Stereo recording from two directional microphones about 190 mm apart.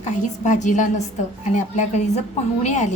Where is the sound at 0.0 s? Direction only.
40° left (ahead or behind).